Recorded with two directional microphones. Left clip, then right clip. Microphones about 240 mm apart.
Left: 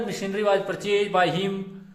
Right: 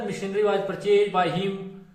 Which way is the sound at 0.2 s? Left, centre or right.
Left.